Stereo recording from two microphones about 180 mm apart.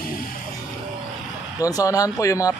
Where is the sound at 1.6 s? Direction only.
20° left (ahead or behind).